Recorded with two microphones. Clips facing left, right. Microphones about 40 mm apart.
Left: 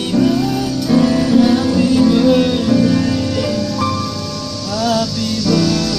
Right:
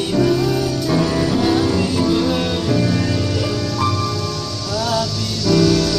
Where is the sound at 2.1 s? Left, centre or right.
Centre.